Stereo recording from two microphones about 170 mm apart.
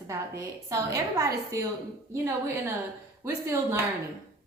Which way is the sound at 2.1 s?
15° right (ahead or behind).